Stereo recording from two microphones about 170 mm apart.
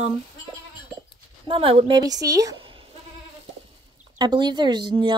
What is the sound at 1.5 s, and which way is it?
Speech, 35° right (ahead or behind).